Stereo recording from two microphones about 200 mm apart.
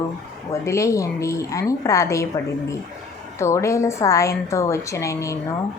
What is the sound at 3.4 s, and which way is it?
Speech, 15° left (ahead or behind).